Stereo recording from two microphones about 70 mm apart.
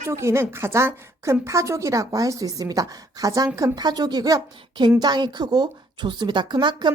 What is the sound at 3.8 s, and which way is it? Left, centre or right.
Speech, right.